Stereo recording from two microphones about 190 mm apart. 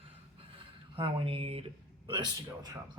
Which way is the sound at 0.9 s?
30° right (ahead or behind).